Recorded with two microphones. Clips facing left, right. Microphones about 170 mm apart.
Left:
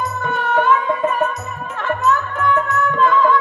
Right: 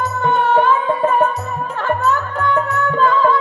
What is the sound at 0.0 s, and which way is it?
Music, 25° right (ahead or behind).